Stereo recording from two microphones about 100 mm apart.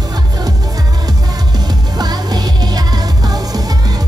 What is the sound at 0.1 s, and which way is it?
Music, 40° right (ahead or behind).